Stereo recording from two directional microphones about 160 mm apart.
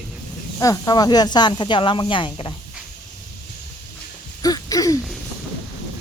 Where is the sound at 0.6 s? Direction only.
20° left (ahead or behind).